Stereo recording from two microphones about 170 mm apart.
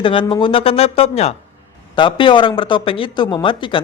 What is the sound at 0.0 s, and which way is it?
A man's voice, 30° left (ahead or behind).